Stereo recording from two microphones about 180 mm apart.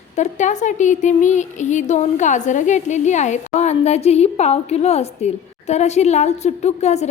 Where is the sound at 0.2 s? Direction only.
40° left (ahead or behind).